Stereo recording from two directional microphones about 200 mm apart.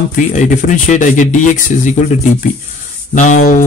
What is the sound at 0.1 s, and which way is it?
Speech, 40° left (ahead or behind).